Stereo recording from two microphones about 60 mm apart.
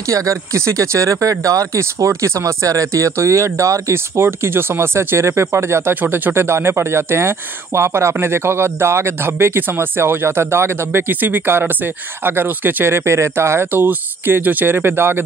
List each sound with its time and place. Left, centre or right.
0.1 s speech: right
1.8 s speech: right
3.9 s speech: right
6.3 s speech: right